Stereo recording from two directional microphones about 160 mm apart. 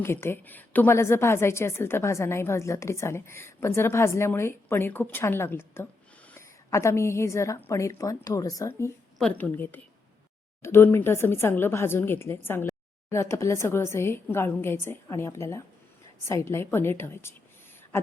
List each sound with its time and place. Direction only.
0.0 s a woman's voice: 15° left (ahead or behind)
9.1 s a woman's voice: 10° left (ahead or behind)